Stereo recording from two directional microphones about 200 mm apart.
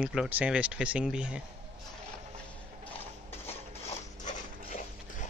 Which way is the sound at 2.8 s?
10° left (ahead or behind).